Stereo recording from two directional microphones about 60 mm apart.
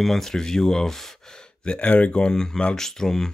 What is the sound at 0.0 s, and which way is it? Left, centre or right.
Speech, centre.